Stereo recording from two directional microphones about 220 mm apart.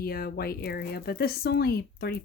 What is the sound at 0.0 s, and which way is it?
Speech, 45° left (ahead or behind).